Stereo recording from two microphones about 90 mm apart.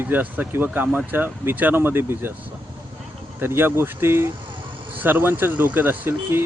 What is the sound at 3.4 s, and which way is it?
Speech, 25° right (ahead or behind).